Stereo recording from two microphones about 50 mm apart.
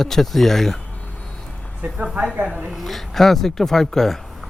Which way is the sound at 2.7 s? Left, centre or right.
Centre.